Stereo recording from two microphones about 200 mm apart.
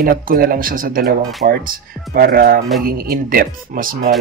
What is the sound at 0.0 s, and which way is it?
Speech, 45° right (ahead or behind).